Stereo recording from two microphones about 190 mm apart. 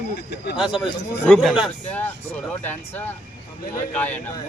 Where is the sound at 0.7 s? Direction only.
Centre (ahead or behind).